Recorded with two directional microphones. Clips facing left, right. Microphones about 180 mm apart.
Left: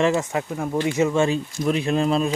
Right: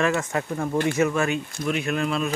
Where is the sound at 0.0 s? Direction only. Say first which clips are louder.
Left 3 dB; 15° left (ahead or behind).